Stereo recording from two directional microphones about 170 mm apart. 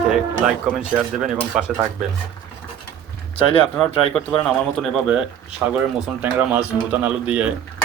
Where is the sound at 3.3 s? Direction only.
35° left (ahead or behind).